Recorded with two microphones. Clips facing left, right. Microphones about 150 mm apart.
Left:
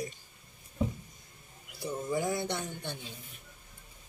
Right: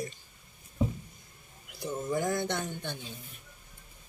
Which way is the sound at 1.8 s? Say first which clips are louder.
Right 1 dB; centre (ahead or behind).